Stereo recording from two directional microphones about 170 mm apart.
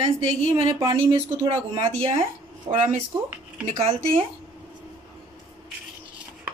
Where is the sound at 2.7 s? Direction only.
30° right (ahead or behind).